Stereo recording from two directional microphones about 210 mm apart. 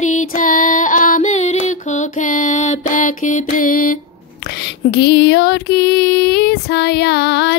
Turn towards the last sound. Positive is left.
turn(degrees=55)  # may be behind; listen again after turning